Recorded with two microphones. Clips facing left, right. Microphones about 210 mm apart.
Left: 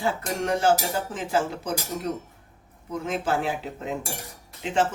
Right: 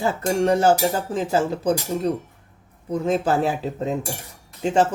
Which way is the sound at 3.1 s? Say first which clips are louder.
Right 6 dB; 40° right (ahead or behind).